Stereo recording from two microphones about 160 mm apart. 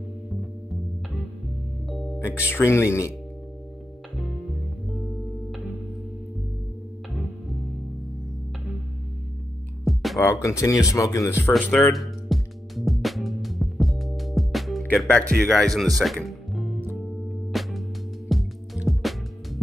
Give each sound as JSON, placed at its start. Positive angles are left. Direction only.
{"t": 1.9, "sound": "music", "side_deg": 0}
{"t": 2.1, "sound": "speech", "side_deg": 15}
{"t": 10.1, "sound": "speech", "side_deg": 20}
{"t": 11.5, "sound": "music", "side_deg": 5}
{"t": 15.3, "sound": "speech", "side_deg": 5}
{"t": 16.0, "sound": "music", "side_deg": 0}